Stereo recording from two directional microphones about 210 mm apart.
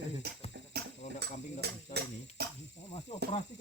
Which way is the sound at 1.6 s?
50° right (ahead or behind).